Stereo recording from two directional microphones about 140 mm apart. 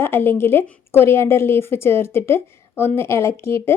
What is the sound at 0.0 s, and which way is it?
A woman's voice, 15° left (ahead or behind).